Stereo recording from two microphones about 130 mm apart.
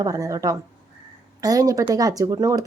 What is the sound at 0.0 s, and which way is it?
A woman's voice, 25° right (ahead or behind).